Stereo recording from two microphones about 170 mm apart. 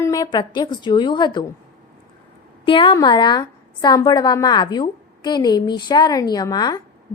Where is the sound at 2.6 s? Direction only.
30° left (ahead or behind).